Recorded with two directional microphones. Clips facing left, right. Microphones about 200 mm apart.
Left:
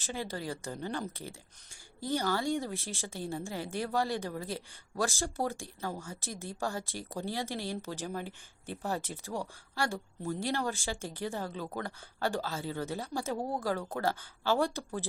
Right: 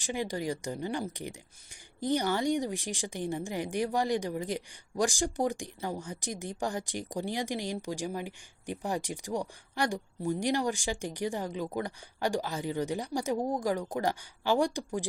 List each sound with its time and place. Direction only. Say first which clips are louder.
0.0 s speech: right 5 dB; 15° right (ahead or behind)